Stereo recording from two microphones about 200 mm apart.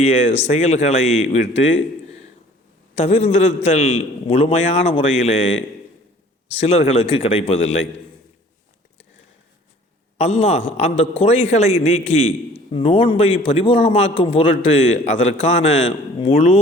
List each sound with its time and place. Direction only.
0.0 s a man's voice: 30° left (ahead or behind)
2.9 s a man's voice: 30° left (ahead or behind)
6.6 s a man's voice: 30° left (ahead or behind)
10.2 s a man's voice: 30° left (ahead or behind)